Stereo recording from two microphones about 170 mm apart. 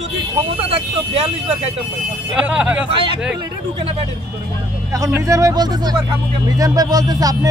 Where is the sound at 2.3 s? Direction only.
5° right (ahead or behind).